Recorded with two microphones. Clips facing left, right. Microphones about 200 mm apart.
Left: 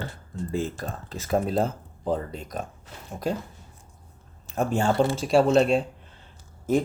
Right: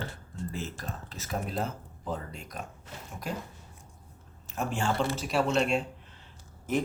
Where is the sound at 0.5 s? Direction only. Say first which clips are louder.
Left 13 dB; 35° left (ahead or behind).